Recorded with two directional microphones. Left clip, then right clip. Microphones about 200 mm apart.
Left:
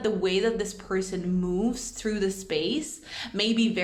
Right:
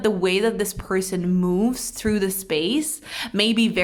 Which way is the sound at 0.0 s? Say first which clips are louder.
Right 5 dB; 35° right (ahead or behind).